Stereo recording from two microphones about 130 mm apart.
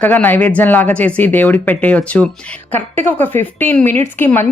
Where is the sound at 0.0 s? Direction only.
15° left (ahead or behind).